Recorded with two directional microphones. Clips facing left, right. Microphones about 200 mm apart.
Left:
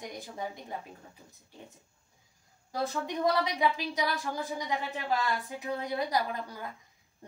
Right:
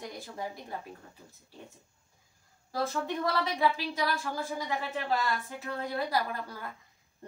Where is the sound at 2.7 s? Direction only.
15° left (ahead or behind).